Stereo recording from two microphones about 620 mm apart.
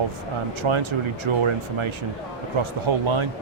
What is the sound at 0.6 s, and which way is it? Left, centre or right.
A man's voice, right.